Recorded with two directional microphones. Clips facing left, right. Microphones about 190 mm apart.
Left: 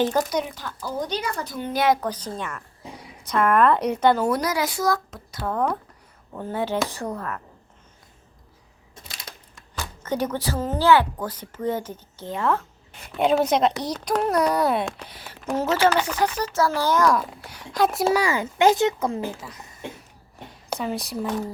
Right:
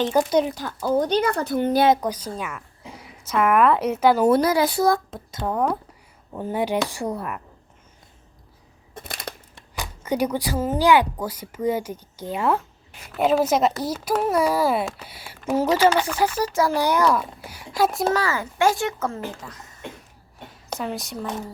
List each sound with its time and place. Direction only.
0.3 s speech: 35° right (ahead or behind); by 1.7 s 55° right (ahead or behind)
1.7 s speech: 30° right (ahead or behind)
2.0 s speech: 10° right (ahead or behind)
4.2 s speech: 25° right (ahead or behind)
5.5 s speech: 10° right (ahead or behind)
9.0 s a sound: 55° right (ahead or behind)
9.7 s speech: 10° right (ahead or behind)
18.1 s a child's voice: 15° left (ahead or behind)
20.7 s a woman's voice: centre (ahead or behind)